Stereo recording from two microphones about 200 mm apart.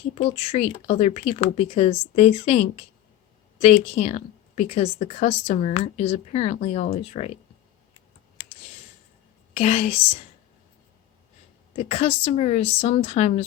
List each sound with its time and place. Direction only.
0.3 s speech: 30° left (ahead or behind)
9.6 s speech: 30° left (ahead or behind)
11.8 s speech: 30° left (ahead or behind)